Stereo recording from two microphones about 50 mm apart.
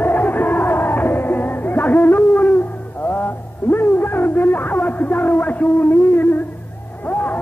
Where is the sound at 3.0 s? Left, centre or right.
Left.